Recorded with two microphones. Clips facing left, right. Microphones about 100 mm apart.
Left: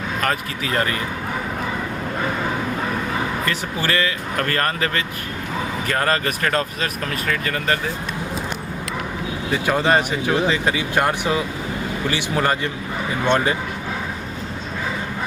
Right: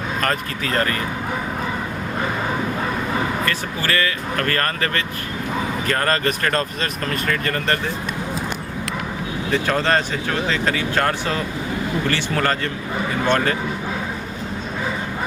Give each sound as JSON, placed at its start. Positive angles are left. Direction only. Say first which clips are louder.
{"t": 0.2, "sound": "speech", "louder": "even", "side_deg": 10}
{"t": 3.4, "sound": "speech", "louder": "even", "side_deg": 15}
{"t": 9.5, "sound": "speech", "louder": "left 1 dB", "side_deg": 10}